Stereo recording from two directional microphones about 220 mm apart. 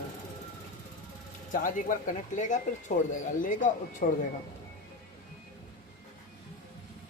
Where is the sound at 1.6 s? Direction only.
35° left (ahead or behind).